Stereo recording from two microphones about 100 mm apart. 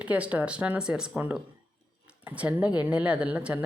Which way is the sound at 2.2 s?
15° right (ahead or behind).